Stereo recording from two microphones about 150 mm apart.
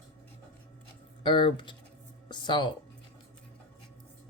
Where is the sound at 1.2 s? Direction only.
35° left (ahead or behind).